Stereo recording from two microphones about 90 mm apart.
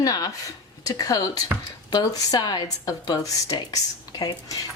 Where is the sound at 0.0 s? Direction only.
45° left (ahead or behind).